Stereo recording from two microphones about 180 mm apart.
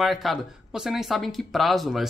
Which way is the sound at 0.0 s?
Centre (ahead or behind).